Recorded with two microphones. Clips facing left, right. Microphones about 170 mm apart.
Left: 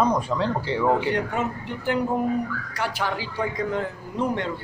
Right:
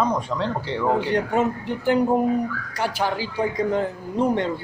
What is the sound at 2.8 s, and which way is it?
Speech, 35° right (ahead or behind).